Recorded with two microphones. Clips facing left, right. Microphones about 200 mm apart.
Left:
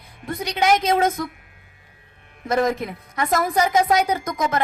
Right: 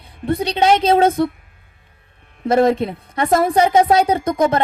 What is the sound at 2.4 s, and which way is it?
Speech, 30° right (ahead or behind).